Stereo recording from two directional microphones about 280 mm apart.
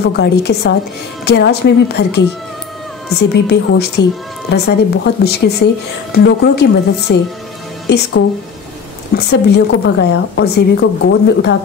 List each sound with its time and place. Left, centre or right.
0.0 s a woman's voice: left
9.2 s a woman's voice: left